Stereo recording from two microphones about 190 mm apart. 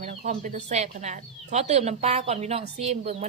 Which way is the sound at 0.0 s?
35° right (ahead or behind).